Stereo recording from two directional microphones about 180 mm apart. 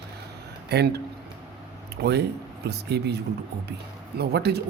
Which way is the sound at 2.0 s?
65° right (ahead or behind).